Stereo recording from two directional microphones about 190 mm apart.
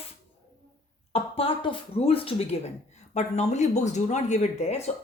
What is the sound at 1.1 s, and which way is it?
Speech, 30° left (ahead or behind).